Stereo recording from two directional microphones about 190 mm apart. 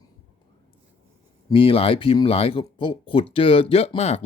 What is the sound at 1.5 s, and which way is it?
Speech, 30° left (ahead or behind).